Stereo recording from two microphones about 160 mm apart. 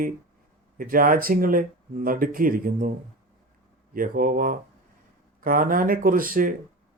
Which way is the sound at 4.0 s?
60° right (ahead or behind).